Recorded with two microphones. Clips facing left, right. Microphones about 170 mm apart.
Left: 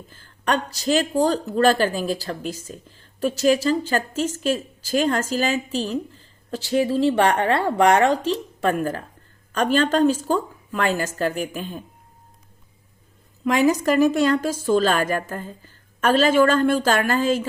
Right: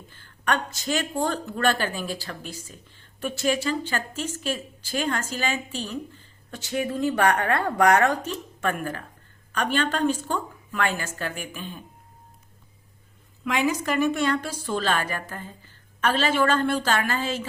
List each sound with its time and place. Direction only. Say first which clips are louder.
0.5 s a woman's voice: left 6 dB; 35° left (ahead or behind)
13.4 s a woman's voice: left 6 dB; 40° left (ahead or behind)